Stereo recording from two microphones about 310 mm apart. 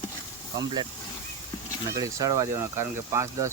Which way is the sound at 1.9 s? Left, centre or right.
Centre.